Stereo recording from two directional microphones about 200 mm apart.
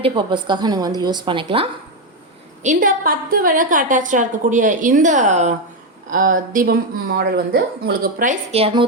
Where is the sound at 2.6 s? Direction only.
40° right (ahead or behind).